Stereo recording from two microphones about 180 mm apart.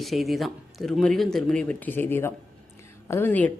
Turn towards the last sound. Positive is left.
turn(degrees=10)  # may be behind; listen again after turning